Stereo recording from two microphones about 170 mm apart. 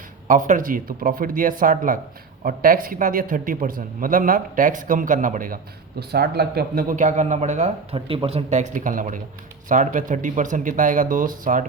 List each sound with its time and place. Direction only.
0.3 s a man's voice: 50° right (ahead or behind)
6.0 s speech: 65° right (ahead or behind)